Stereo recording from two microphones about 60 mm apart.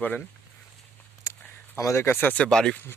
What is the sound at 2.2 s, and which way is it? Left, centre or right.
Speech, left.